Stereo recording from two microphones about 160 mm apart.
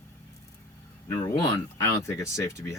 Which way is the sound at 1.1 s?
20° left (ahead or behind).